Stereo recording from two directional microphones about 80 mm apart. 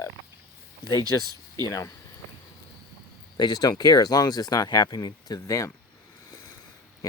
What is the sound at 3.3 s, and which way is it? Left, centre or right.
Speech, left.